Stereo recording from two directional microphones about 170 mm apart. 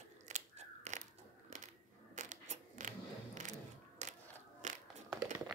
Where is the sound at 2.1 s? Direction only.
45° right (ahead or behind).